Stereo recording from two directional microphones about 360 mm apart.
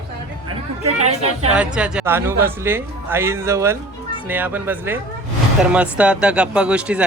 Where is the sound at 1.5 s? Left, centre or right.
Centre.